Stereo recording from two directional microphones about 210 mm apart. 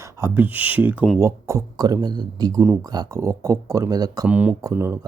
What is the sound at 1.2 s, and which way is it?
A man's voice, 15° right (ahead or behind).